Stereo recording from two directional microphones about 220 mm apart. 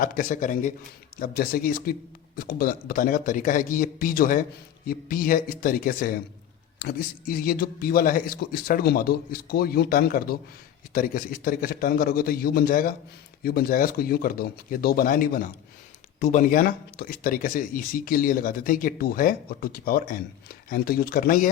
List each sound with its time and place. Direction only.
0.0 s a man's voice: 40° left (ahead or behind)